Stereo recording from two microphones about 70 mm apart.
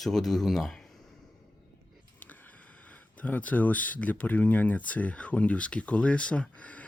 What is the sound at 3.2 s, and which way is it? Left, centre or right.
Speech, left.